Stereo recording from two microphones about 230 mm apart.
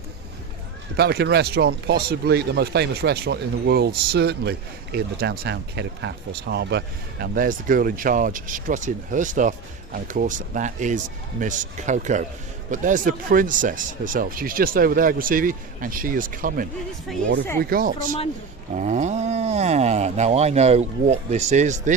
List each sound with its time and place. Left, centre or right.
0.9 s speech: right
17.1 s speech: centre
17.6 s speech: right